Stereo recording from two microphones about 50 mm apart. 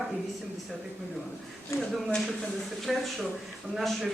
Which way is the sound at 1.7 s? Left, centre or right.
Left.